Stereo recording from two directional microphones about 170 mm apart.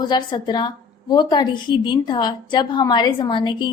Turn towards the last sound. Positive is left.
turn(degrees=25)  # may be behind; listen again after turning